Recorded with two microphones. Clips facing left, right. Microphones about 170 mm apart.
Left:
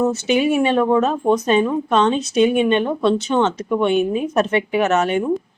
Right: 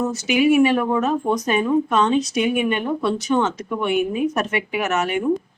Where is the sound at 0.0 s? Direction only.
25° left (ahead or behind).